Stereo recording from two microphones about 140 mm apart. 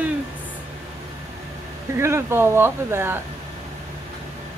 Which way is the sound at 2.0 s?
20° right (ahead or behind).